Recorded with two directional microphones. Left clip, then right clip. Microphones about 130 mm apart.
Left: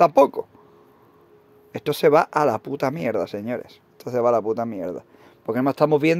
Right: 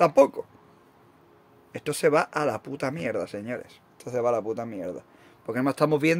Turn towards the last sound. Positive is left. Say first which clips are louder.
# left 4 dB
turn(degrees=20)  # may be behind; listen again after turning